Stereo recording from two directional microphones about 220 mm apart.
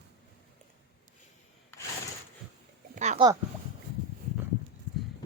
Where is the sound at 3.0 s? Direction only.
30° right (ahead or behind).